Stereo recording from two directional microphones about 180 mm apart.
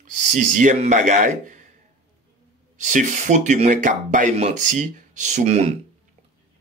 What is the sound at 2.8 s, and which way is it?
Speech, 45° right (ahead or behind).